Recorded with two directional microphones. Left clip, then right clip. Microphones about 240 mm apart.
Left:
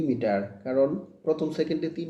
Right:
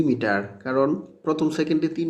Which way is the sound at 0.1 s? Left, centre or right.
Right.